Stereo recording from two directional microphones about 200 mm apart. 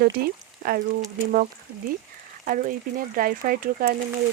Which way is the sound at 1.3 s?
45° right (ahead or behind).